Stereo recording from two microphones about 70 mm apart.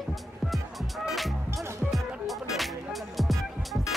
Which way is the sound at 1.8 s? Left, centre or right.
Centre.